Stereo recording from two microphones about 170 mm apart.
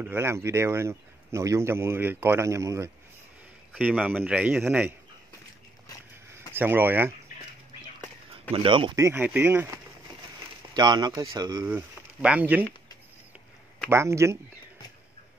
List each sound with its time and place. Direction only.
0.0 s speech: 15° right (ahead or behind)
6.5 s speech: 10° right (ahead or behind)
8.3 s speech: 35° right (ahead or behind)
8.9 s speech: 15° right (ahead or behind)
10.7 s speech: 25° right (ahead or behind); by 12.6 s 10° right (ahead or behind)
13.8 s speech: 15° right (ahead or behind)